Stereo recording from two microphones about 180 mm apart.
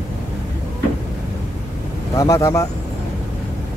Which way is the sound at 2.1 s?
15° left (ahead or behind).